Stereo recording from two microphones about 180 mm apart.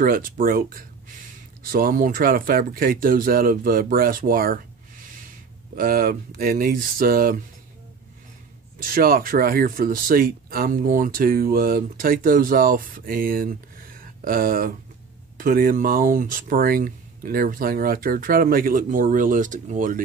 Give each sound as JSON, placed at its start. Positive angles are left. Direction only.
{"t": 0.0, "sound": "speech", "side_deg": -50}
{"t": 8.7, "sound": "speech", "side_deg": -50}